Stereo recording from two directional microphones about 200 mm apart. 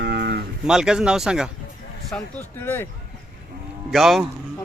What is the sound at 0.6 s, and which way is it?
Speech, 5° right (ahead or behind).